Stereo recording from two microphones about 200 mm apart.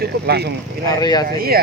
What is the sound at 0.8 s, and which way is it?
Speech, 20° left (ahead or behind).